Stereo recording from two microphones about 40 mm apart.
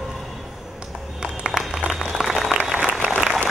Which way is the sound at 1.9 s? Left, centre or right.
Centre.